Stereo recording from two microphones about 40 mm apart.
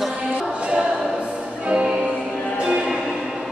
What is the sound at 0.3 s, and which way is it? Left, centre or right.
Music, right.